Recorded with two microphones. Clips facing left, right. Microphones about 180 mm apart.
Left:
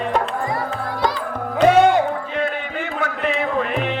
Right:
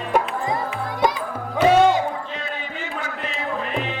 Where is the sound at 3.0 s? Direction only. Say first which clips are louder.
Left 9 dB; 60° left (ahead or behind).